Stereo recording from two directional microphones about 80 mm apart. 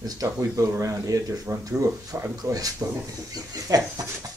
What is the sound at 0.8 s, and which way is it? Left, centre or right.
Speech, right.